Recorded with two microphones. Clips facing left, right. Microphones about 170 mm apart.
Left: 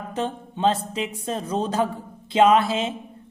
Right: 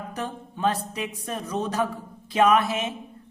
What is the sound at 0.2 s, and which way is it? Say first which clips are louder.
Speech: left 4 dB; 25° left (ahead or behind).